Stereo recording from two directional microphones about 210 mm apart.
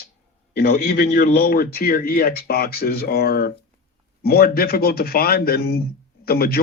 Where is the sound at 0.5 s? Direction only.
50° left (ahead or behind).